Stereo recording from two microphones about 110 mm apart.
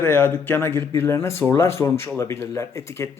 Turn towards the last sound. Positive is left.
turn(degrees=25)  # may be behind; listen again after turning